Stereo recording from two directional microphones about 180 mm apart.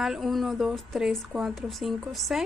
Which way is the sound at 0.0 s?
Centre (ahead or behind).